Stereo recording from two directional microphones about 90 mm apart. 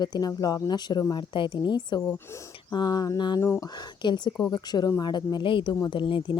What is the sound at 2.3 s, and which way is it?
Speech, 35° left (ahead or behind).